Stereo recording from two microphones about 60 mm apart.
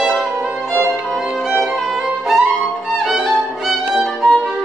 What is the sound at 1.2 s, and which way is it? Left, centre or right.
Violin, centre.